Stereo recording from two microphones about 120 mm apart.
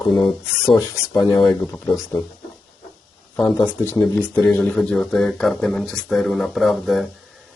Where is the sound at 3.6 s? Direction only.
20° left (ahead or behind).